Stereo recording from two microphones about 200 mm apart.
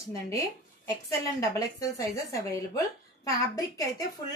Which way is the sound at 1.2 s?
15° left (ahead or behind).